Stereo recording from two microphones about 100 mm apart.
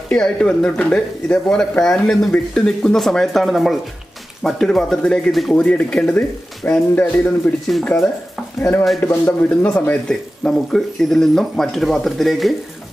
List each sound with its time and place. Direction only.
0.1 s speech: 5° left (ahead or behind)